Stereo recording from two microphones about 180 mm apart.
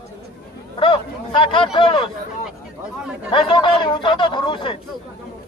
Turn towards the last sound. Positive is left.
turn(degrees=25)  # may be behind; listen again after turning